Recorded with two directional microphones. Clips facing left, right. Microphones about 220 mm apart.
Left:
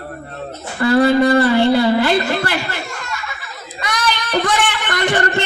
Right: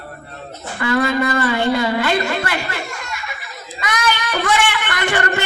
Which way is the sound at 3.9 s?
40° left (ahead or behind).